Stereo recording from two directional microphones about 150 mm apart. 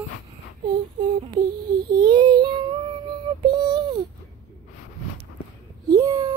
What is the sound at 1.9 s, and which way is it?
Child singing, 30° right (ahead or behind).